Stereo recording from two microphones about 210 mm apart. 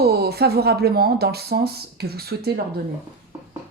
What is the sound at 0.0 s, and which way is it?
Speech, 50° right (ahead or behind).